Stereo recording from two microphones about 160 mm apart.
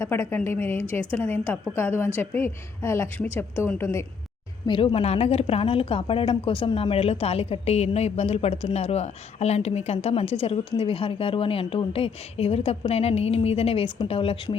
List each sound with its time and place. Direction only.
0.0 s a woman's voice: 15° left (ahead or behind)
4.6 s a woman's voice: 30° left (ahead or behind)